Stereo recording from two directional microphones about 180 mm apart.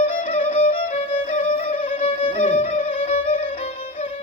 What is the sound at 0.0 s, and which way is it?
Music, 35° left (ahead or behind).